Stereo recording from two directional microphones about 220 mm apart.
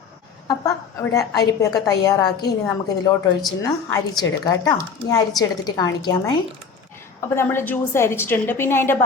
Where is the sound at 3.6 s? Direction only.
15° left (ahead or behind).